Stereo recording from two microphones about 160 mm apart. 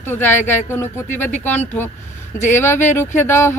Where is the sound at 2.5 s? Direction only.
15° left (ahead or behind).